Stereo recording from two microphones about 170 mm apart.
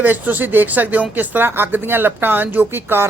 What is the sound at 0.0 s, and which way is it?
Speech, 10° right (ahead or behind).